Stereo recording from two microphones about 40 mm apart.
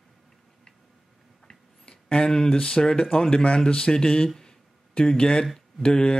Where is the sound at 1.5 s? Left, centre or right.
Left.